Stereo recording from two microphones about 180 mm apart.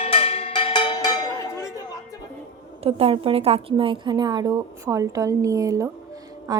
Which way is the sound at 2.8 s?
30° right (ahead or behind).